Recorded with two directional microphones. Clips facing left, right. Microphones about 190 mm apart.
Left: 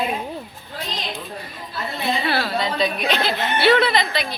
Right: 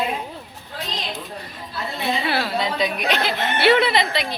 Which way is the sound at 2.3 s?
15° right (ahead or behind).